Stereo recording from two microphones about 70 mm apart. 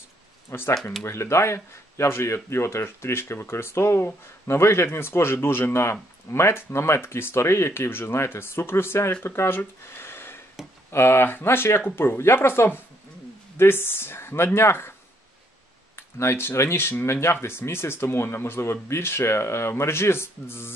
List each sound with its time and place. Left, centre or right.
0.5 s speech: left
16.0 s speech: left